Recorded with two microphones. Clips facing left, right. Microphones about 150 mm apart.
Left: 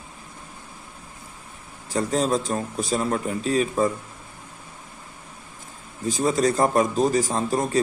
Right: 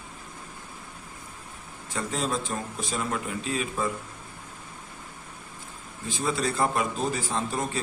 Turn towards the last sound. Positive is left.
turn(degrees=40)  # may be behind; listen again after turning